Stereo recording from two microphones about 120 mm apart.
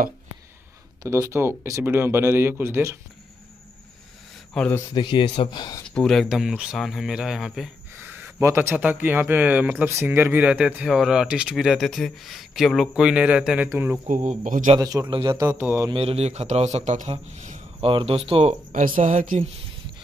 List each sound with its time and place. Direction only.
1.0 s speech: 25° right (ahead or behind)
4.6 s speech: 5° left (ahead or behind)
4.9 s speech: 40° left (ahead or behind)
5.9 s speech: 5° left (ahead or behind)
8.0 s speech: 20° right (ahead or behind)
14.0 s speech: 85° right
14.8 s speech: 30° right (ahead or behind)
15.0 s a man's voice: 40° right (ahead or behind)
15.4 s speech: 15° right (ahead or behind)
15.9 s a man's voice: 50° right (ahead or behind); by 17.6 s 80° right
17.7 s speech: 50° right (ahead or behind)
18.5 s speech: 80° right